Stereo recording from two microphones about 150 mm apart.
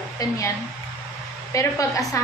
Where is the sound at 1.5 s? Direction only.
20° left (ahead or behind).